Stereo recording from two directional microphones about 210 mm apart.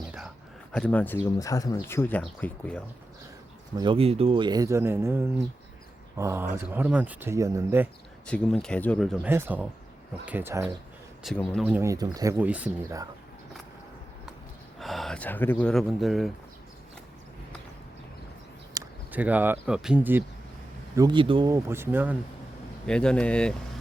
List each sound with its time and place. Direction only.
0.7 s speech: 5° left (ahead or behind)
3.8 s speech: 25° right (ahead or behind)
8.3 s speech: 5° left (ahead or behind)
11.2 s speech: centre (ahead or behind)
14.8 s speech: centre (ahead or behind)
18.7 s speech: 10° right (ahead or behind)
20.9 s speech: 20° right (ahead or behind)
22.9 s speech: 5° left (ahead or behind)